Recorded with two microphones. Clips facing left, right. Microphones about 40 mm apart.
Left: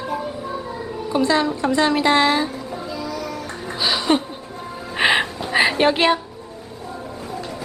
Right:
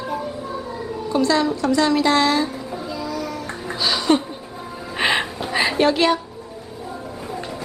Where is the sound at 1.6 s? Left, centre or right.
Left.